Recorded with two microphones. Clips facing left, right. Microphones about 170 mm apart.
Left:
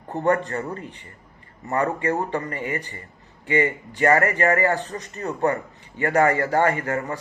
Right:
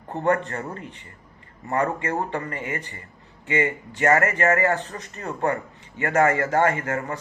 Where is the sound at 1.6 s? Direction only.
35° left (ahead or behind).